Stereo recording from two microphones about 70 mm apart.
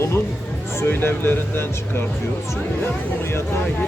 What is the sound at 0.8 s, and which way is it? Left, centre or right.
Speech, left.